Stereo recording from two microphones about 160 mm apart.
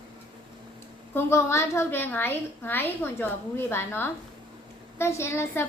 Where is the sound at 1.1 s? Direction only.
15° left (ahead or behind).